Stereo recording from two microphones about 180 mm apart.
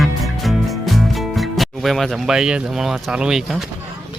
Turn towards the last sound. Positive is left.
turn(degrees=0)  # may be behind; listen again after turning